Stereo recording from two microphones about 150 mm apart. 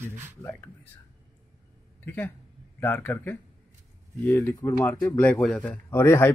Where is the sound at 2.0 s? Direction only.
15° left (ahead or behind).